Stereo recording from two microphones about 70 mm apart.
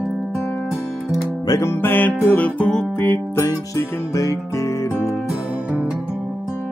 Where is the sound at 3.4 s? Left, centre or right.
Left.